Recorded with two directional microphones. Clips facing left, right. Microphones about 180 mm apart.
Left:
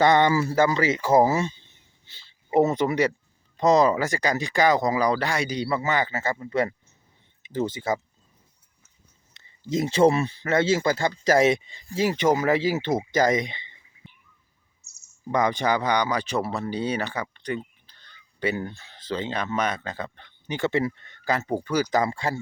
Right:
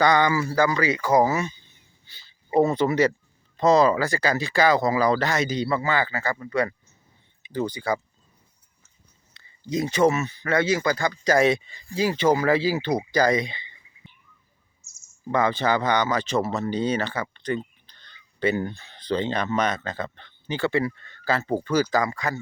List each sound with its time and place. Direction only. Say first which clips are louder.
0.0 s speech: left 1 dB; 25° left (ahead or behind)
9.3 s speech: left 1 dB; 25° left (ahead or behind)
14.8 s bird: right 2 dB; 65° left (ahead or behind)
15.3 s speech: right 1 dB; 15° left (ahead or behind)
22.0 s speech: left 1 dB; 30° left (ahead or behind)